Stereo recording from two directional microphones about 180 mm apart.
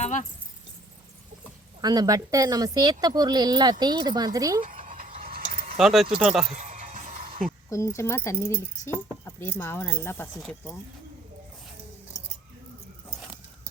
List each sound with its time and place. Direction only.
0.0 s keys jangling: 45° left (ahead or behind)
1.8 s speech: 20° right (ahead or behind)
4.9 s a sound: 50° right (ahead or behind)
5.2 s mechanisms: 55° right (ahead or behind)
5.7 s speech: centre (ahead or behind)
6.5 s music: 40° right (ahead or behind)
7.7 s speech: 15° left (ahead or behind)